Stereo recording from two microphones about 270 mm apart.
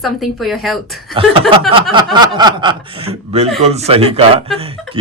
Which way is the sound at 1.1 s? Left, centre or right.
Centre.